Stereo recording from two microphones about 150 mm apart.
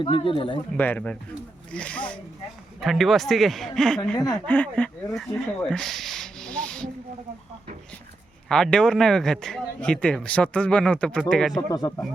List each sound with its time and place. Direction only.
0.0 s speech: 35° left (ahead or behind)
0.8 s speech: 10° left (ahead or behind)
5.6 s rub: 5° left (ahead or behind)
8.4 s speech: 5° left (ahead or behind)
11.7 s speech: 25° left (ahead or behind)